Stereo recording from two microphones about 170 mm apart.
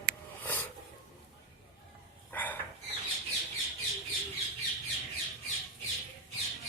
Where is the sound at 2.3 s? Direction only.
10° left (ahead or behind).